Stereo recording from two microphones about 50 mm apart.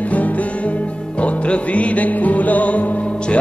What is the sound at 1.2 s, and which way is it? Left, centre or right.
Music, left.